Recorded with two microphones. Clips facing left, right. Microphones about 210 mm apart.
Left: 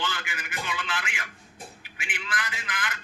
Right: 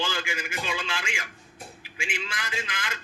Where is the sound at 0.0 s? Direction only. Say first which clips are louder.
Right 3 dB; 25° right (ahead or behind).